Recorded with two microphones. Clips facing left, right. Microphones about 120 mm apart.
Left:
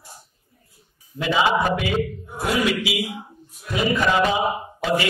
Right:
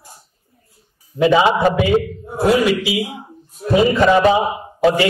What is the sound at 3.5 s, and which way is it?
Speech, 35° right (ahead or behind).